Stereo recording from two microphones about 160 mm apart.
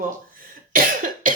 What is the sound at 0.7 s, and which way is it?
Cough, 60° right (ahead or behind).